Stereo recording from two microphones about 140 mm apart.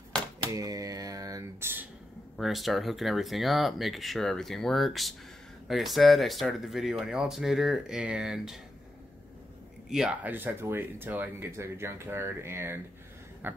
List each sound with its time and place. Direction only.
0.5 s a sound: 25° right (ahead or behind)
2.3 s speech: centre (ahead or behind)
9.8 s speech: 5° right (ahead or behind)